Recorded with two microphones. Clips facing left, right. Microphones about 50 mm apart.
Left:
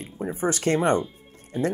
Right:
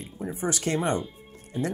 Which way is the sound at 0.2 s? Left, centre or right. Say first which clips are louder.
Left 4 dB; left.